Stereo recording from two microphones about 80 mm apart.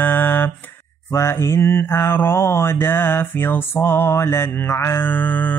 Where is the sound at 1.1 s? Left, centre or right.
Left.